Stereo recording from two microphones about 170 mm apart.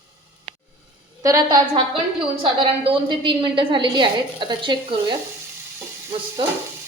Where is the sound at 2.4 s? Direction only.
30° right (ahead or behind).